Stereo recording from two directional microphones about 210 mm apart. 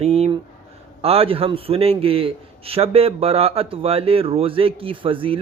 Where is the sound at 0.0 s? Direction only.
30° right (ahead or behind).